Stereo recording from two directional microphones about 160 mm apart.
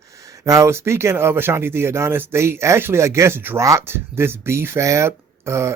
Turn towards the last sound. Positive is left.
turn(degrees=-15)  # may be behind; listen again after turning